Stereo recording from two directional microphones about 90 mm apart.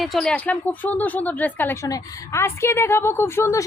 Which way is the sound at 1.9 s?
30° left (ahead or behind).